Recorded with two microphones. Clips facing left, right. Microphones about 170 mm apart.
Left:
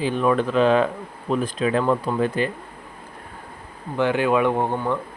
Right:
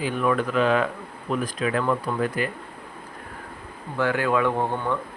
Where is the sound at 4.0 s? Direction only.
20° left (ahead or behind).